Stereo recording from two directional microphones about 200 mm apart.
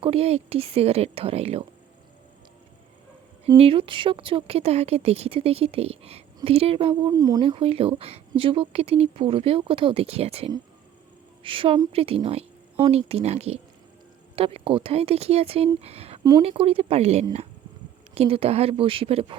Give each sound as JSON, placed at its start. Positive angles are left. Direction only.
{"t": 0.0, "sound": "speech", "side_deg": -30}
{"t": 3.5, "sound": "speech", "side_deg": -25}